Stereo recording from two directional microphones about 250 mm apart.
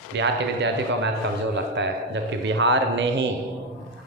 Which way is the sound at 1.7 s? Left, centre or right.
Right.